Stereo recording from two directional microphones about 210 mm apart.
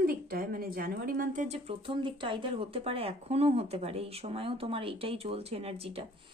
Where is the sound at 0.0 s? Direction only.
45° right (ahead or behind).